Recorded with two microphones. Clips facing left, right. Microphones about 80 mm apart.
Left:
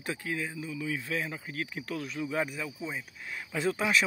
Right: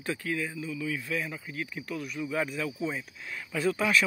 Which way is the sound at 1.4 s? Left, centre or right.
Left.